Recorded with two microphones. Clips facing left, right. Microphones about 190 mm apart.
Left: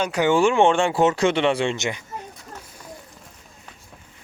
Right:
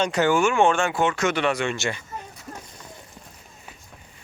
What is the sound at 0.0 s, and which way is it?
Speech, 10° left (ahead or behind).